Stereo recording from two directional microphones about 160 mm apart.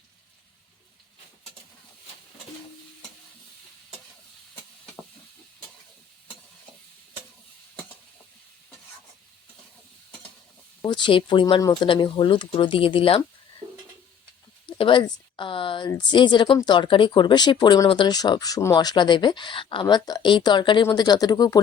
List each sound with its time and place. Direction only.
10.8 s speech: 30° left (ahead or behind)
13.6 s a sound: 30° right (ahead or behind)
14.7 s a woman's voice: 30° left (ahead or behind)